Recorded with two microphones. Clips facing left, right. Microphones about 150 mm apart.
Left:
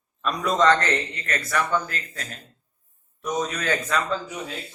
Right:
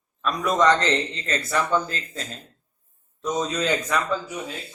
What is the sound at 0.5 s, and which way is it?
Speech, 15° right (ahead or behind).